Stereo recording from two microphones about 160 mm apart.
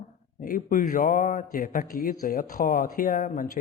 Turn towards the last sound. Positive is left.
turn(degrees=55)  # may be behind; listen again after turning